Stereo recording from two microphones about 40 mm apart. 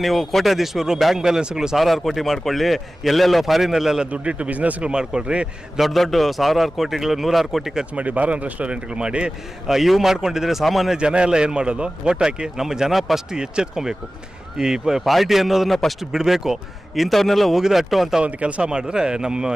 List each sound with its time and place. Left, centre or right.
0.0 s a man's voice: centre
1.2 s speech: centre
1.8 s a man's voice: centre
4.1 s a man's voice: right
4.8 s speech: right
5.8 s a man's voice: centre
7.9 s a man's voice: right
9.6 s speech: centre
10.9 s speech: right; by 13.2 s centre
13.3 s speech: centre
15.0 s a man's voice: centre
18.3 s speech: right